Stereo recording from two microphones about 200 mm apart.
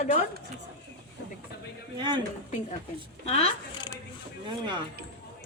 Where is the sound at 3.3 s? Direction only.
30° left (ahead or behind).